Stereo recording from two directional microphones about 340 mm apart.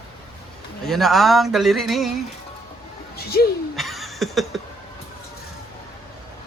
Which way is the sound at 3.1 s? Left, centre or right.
Left.